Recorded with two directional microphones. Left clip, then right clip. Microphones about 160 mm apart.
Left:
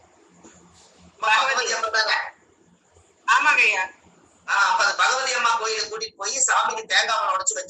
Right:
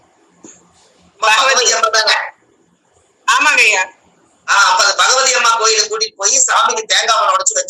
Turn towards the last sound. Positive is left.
turn(degrees=-55)  # may be behind; listen again after turning